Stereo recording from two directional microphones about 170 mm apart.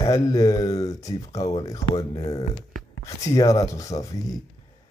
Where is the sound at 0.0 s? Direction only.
20° left (ahead or behind).